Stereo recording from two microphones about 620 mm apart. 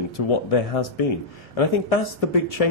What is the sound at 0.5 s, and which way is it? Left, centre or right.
Speech, left.